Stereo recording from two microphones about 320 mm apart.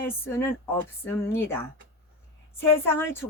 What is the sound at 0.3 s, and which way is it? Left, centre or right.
A woman's voice, centre.